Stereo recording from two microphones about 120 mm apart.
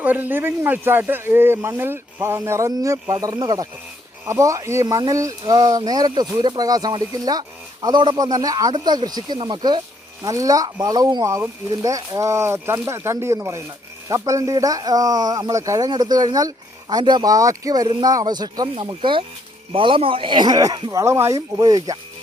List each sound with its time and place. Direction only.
0.0 s speech: 15° right (ahead or behind); by 21.9 s 30° right (ahead or behind)